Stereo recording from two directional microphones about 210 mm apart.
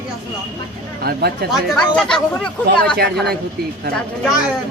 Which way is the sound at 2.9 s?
50° right (ahead or behind).